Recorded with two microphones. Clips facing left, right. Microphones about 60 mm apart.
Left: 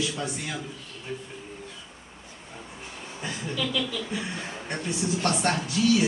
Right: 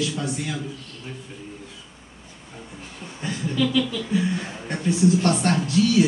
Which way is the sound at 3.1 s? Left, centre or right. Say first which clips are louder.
Right 7 dB; centre.